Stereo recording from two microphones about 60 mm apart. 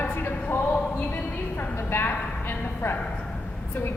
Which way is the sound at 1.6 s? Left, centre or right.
Left.